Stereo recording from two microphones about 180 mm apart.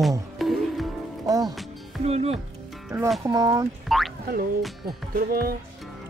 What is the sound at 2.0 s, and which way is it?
Speech, 35° right (ahead or behind).